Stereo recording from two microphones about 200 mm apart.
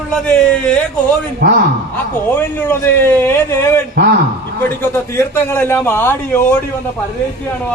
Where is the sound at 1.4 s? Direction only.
55° right (ahead or behind).